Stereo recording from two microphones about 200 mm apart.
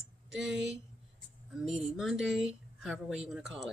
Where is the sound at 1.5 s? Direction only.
Centre (ahead or behind).